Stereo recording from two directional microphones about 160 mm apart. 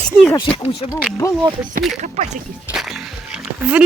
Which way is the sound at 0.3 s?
25° left (ahead or behind).